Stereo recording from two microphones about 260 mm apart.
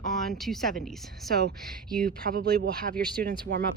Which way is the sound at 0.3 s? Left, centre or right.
Centre.